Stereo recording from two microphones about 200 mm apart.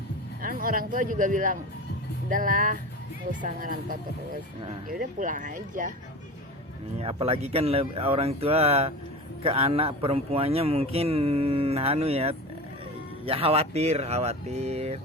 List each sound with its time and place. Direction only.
0.4 s speech: 45° right (ahead or behind)
7.0 s speech: 30° right (ahead or behind)